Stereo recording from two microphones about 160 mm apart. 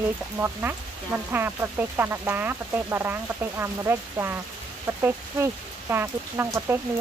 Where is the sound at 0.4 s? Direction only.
15° right (ahead or behind).